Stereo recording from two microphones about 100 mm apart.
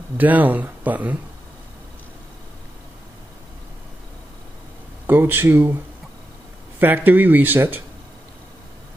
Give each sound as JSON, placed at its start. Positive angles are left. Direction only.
{"t": 0.2, "sound": "speech", "side_deg": -15}
{"t": 5.0, "sound": "speech", "side_deg": -20}
{"t": 6.8, "sound": "speech", "side_deg": -20}